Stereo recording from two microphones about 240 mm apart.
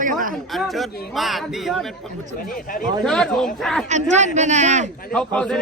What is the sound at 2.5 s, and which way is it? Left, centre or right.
Speech, left.